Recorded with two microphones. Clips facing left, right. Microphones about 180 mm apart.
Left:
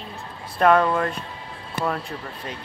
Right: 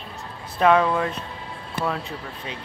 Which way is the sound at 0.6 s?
5° right (ahead or behind).